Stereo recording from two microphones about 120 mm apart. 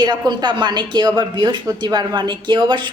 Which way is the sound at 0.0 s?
35° right (ahead or behind).